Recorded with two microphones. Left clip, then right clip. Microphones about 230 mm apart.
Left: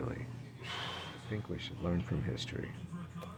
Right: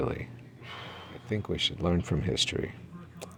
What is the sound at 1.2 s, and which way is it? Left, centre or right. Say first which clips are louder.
Speech: right 17 dB; right.